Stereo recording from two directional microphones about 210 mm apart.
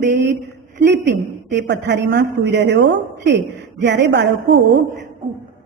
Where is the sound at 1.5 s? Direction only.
55° right (ahead or behind).